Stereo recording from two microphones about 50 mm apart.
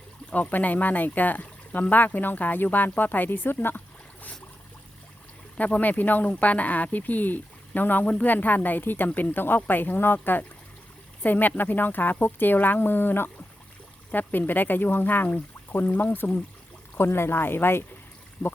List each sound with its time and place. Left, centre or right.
0.3 s speech: left
5.5 s speech: left
17.0 s speech: left